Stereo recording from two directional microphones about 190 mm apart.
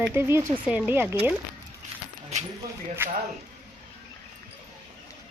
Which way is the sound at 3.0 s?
10° right (ahead or behind).